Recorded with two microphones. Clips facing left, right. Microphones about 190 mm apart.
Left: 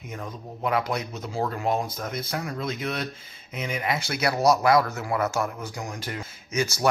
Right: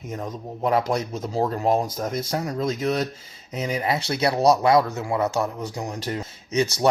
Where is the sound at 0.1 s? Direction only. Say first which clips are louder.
Right 5 dB; 40° right (ahead or behind).